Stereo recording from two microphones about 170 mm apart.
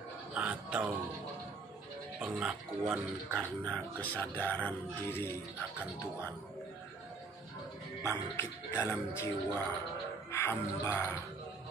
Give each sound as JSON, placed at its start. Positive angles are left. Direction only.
{"t": 0.3, "sound": "music", "side_deg": -5}
{"t": 2.1, "sound": "speech", "side_deg": -5}
{"t": 8.0, "sound": "speech", "side_deg": 15}